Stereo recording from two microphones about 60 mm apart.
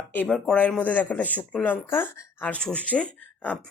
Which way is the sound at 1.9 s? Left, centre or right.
Left.